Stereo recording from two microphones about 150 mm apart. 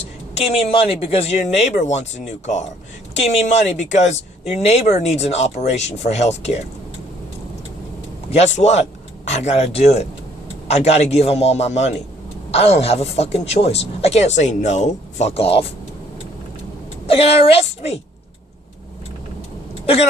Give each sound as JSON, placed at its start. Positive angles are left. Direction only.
{"t": 0.3, "sound": "a woman's voice", "side_deg": 45}
{"t": 8.3, "sound": "a woman's voice", "side_deg": 50}
{"t": 17.1, "sound": "a woman's voice", "side_deg": 40}
{"t": 19.8, "sound": "speech", "side_deg": 40}